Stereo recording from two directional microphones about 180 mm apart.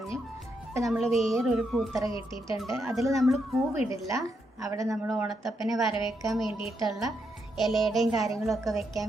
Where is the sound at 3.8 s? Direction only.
15° right (ahead or behind).